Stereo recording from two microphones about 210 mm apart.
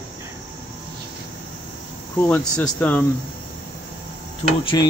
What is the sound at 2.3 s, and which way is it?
Speech, 10° left (ahead or behind).